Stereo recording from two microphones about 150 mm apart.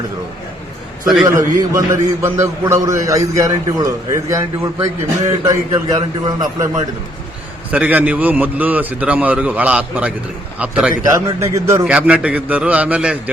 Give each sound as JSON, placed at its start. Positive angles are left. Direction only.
{"t": 1.2, "sound": "a man's voice", "side_deg": -20}
{"t": 7.7, "sound": "a man's voice", "side_deg": -10}
{"t": 11.0, "sound": "a man's voice", "side_deg": -25}
{"t": 11.9, "sound": "a man's voice", "side_deg": -10}